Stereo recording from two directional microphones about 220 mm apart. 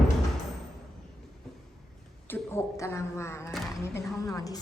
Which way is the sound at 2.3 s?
10° left (ahead or behind).